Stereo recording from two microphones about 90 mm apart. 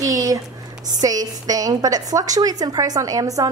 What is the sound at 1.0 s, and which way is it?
A woman's voice, 45° right (ahead or behind).